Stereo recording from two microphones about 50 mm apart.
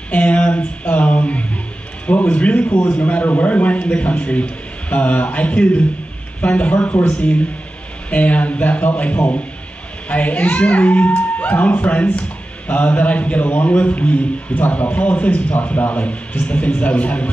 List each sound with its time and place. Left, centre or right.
0.1 s a child's voice: left
2.7 s a man's voice: left
3.0 s a child's voice: left